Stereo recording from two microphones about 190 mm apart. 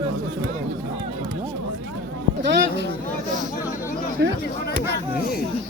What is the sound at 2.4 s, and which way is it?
Speech, 65° right (ahead or behind).